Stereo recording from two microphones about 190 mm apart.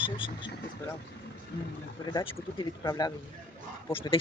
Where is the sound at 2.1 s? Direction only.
20° left (ahead or behind).